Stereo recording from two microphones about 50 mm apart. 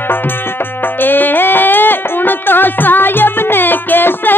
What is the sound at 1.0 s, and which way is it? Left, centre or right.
Music, left.